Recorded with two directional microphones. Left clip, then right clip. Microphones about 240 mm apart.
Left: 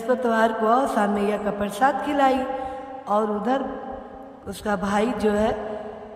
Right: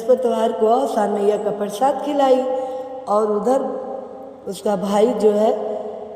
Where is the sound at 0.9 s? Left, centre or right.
Left.